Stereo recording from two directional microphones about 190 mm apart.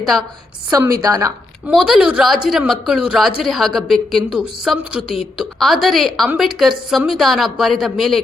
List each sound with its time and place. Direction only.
0.0 s a woman's voice: centre (ahead or behind)
0.7 s a woman's voice: 15° right (ahead or behind)
1.6 s a woman's voice: 5° right (ahead or behind)